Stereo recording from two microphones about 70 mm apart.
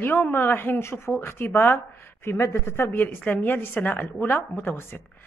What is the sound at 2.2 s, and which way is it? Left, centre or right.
A woman's voice, left.